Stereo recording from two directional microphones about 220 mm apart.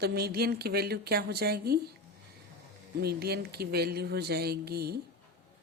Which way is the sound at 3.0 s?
45° right (ahead or behind).